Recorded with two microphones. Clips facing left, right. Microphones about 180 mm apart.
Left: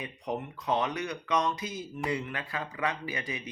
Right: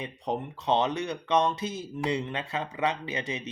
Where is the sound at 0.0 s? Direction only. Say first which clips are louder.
Right 3 dB; 30° right (ahead or behind).